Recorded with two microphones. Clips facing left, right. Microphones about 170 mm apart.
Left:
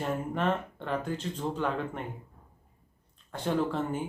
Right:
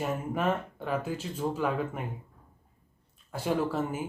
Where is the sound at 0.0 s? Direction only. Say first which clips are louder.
Even; 5° right (ahead or behind).